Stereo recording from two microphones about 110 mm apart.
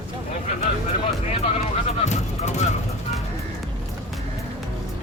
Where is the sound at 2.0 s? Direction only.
90° left.